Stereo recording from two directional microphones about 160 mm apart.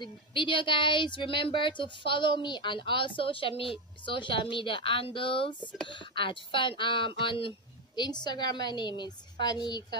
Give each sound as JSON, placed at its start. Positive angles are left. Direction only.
{"t": 0.0, "sound": "a woman's voice", "side_deg": 30}